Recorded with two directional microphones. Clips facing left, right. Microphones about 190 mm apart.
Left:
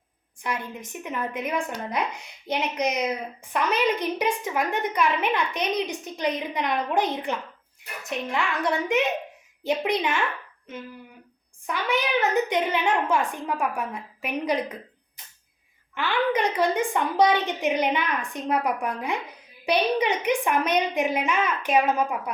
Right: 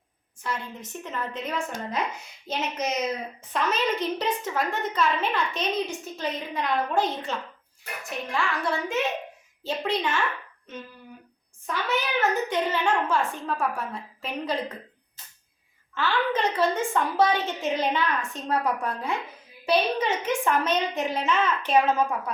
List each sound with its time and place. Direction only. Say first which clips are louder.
0.3 s a woman's voice: left 2 dB; 15° left (ahead or behind)
11.6 s a woman's voice: left 2 dB; 15° left (ahead or behind)
15.2 s a sound: even; 15° left (ahead or behind)
16.0 s a woman's voice: left 2 dB; 15° left (ahead or behind)